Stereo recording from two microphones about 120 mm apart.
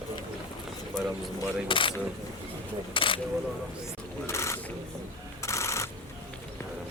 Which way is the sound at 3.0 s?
45° left (ahead or behind).